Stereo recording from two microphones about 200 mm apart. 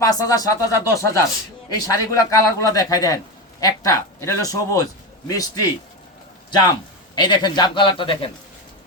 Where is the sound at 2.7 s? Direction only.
20° left (ahead or behind).